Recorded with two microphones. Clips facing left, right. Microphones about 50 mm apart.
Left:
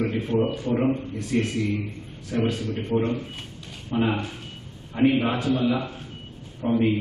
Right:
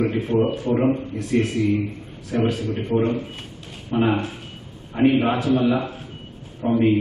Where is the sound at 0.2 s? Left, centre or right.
Centre.